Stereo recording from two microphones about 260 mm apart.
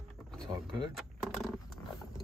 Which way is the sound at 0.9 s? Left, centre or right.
Centre.